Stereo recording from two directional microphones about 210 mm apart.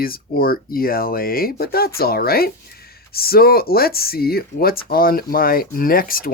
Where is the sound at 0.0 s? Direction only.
45° left (ahead or behind).